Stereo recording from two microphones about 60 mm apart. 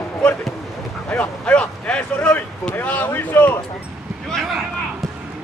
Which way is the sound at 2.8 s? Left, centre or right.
Left.